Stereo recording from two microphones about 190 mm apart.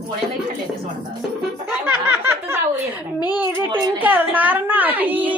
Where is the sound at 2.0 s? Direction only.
10° right (ahead or behind).